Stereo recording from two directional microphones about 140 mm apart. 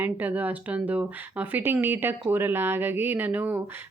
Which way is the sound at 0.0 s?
10° right (ahead or behind).